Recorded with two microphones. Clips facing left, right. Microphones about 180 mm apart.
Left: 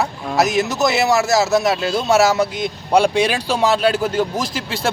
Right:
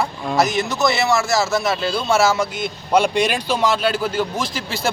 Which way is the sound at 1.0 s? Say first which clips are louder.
Left 3 dB; 40° left (ahead or behind).